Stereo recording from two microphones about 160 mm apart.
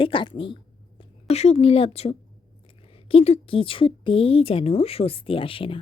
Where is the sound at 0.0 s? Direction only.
30° left (ahead or behind).